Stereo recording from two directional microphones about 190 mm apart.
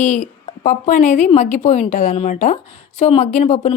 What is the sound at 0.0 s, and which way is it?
Speech, 40° left (ahead or behind).